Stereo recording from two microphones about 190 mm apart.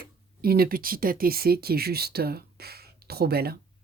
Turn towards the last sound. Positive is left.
turn(degrees=-55)  # may be behind; listen again after turning